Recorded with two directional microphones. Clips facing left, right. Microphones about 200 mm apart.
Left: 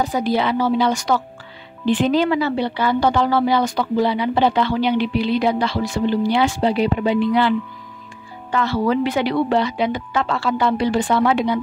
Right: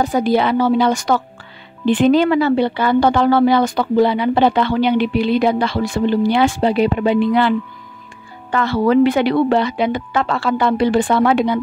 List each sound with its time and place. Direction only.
0.0 s a woman's voice: 50° right (ahead or behind)